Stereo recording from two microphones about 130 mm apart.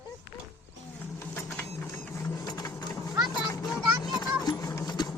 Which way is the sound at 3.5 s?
25° left (ahead or behind).